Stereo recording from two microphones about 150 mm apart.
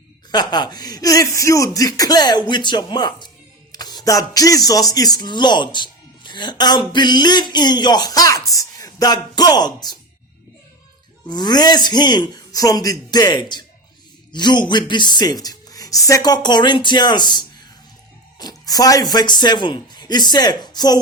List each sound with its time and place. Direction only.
0.3 s speech: 30° left (ahead or behind)
11.3 s speech: 30° left (ahead or behind)